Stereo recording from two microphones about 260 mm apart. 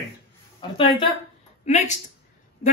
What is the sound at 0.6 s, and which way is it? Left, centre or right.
Speech, centre.